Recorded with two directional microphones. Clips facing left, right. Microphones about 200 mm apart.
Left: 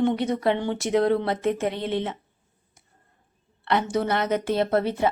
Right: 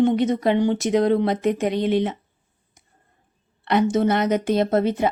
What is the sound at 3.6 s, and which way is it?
Speech, 15° right (ahead or behind).